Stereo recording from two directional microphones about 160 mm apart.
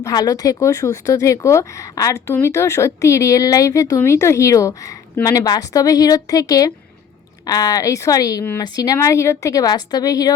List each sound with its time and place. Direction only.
0.0 s speech: 25° left (ahead or behind)